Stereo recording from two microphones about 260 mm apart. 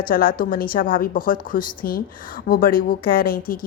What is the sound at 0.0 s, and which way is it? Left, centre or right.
A woman's voice, left.